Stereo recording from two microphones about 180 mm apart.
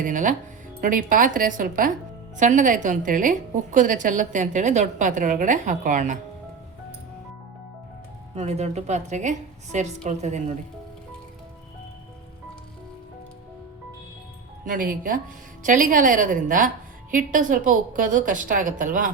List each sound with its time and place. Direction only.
0.0 s a woman's voice: 45° right (ahead or behind)
8.4 s a woman's voice: 35° right (ahead or behind)
14.6 s a woman's voice: 50° right (ahead or behind)